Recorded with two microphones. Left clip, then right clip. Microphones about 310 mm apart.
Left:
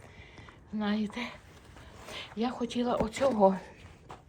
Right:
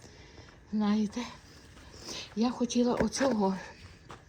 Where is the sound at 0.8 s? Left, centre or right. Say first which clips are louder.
Right 1 dB; centre.